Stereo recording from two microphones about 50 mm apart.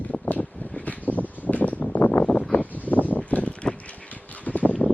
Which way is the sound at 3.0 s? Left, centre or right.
Left.